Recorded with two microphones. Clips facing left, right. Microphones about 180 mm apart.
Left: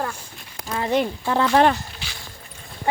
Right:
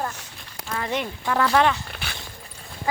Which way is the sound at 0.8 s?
30° left (ahead or behind).